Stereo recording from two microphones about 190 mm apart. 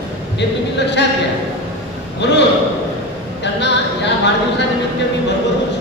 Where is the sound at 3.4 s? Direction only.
65° left (ahead or behind).